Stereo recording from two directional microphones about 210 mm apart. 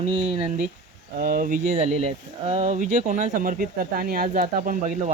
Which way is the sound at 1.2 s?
40° right (ahead or behind).